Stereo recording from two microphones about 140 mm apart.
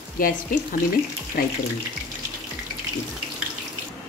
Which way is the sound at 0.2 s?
85° left.